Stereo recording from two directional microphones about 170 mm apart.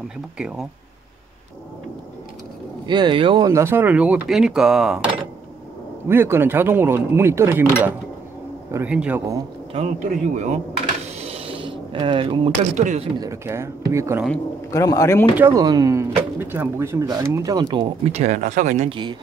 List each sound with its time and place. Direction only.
0.4 s speech: 5° right (ahead or behind)
2.9 s speech: 30° right (ahead or behind)
3.4 s speech: 15° right (ahead or behind)
6.0 s speech: 15° right (ahead or behind)
8.7 s speech: 10° right (ahead or behind)
9.7 s a man's voice: 40° right (ahead or behind)
11.1 s a sound: 35° right (ahead or behind)
12.7 s a man's voice: 45° right (ahead or behind)
13.2 s speech: 15° right (ahead or behind)
14.7 s speech: 20° left (ahead or behind)
15.3 s speech: 15° right (ahead or behind); by 18.9 s 50° right (ahead or behind)
18.9 s speech: 25° right (ahead or behind)